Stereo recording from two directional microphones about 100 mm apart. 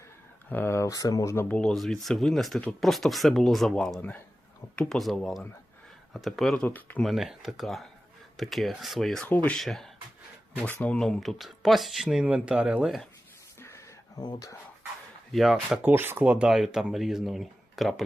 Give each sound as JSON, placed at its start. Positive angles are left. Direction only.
{"t": 0.5, "sound": "speech", "side_deg": 25}
{"t": 1.5, "sound": "speech", "side_deg": 10}
{"t": 6.6, "sound": "speech", "side_deg": 15}
{"t": 7.0, "sound": "speech", "side_deg": 0}
{"t": 9.2, "sound": "speech", "side_deg": 15}
{"t": 9.6, "sound": "speech", "side_deg": 5}
{"t": 10.7, "sound": "speech", "side_deg": 15}
{"t": 13.6, "sound": "a sound", "side_deg": 30}
{"t": 14.2, "sound": "speech", "side_deg": 40}
{"t": 15.3, "sound": "speech", "side_deg": 0}
{"t": 15.8, "sound": "speech", "side_deg": -20}